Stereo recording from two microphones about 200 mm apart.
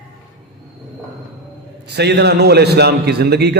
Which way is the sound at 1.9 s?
55° right (ahead or behind).